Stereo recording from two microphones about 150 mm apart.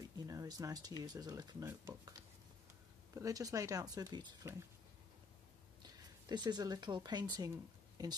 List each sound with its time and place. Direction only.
0.3 s speech: 25° right (ahead or behind)
5.8 s speech: 30° right (ahead or behind)